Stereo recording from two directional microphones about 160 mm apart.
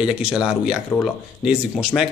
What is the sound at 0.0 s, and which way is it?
A man's voice, 5° right (ahead or behind).